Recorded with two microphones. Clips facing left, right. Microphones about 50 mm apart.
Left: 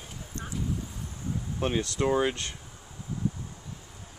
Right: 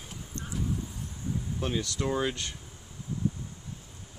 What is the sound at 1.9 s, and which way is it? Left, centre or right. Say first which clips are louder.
Speech: left 6 dB; centre.